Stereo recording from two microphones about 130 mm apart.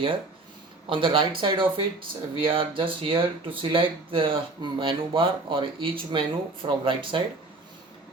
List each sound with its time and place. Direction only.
0.9 s speech: 40° right (ahead or behind)